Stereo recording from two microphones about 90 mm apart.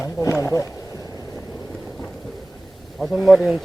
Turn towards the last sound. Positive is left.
turn(degrees=0)  # may be behind; listen again after turning